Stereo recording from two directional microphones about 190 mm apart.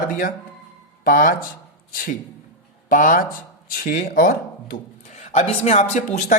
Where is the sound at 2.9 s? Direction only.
45° left (ahead or behind).